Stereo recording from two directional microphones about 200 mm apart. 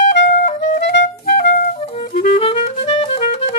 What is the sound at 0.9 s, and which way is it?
Clarinet, 50° left (ahead or behind).